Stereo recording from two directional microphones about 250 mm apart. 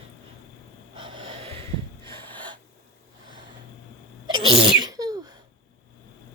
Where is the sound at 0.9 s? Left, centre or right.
Centre.